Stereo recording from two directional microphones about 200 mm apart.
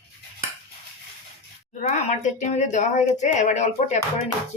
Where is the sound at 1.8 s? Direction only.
35° left (ahead or behind).